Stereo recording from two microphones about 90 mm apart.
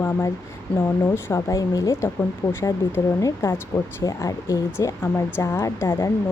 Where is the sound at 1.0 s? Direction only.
30° left (ahead or behind).